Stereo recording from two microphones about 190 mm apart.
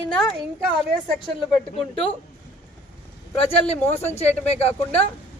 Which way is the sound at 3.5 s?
35° left (ahead or behind).